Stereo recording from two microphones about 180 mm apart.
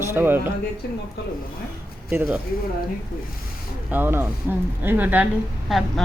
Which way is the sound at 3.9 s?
10° right (ahead or behind).